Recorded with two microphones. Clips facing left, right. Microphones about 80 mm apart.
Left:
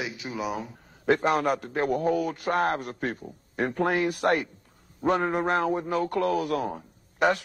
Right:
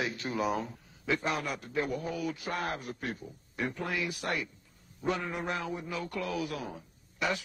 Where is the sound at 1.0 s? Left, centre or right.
Left.